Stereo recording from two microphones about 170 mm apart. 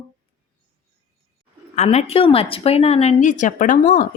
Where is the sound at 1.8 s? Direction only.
40° left (ahead or behind).